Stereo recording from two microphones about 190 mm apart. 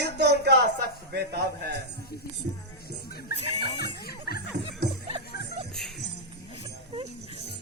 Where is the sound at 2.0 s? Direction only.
55° left (ahead or behind).